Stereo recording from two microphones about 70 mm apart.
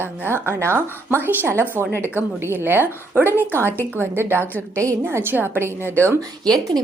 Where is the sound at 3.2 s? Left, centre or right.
Left.